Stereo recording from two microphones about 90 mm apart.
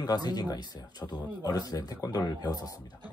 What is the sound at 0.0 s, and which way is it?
Speech, 50° left (ahead or behind).